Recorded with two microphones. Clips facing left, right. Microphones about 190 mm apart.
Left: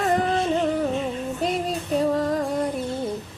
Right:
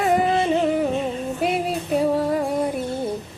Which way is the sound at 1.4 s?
5° right (ahead or behind).